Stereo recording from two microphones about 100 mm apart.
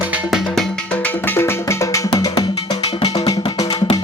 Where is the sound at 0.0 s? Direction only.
15° right (ahead or behind).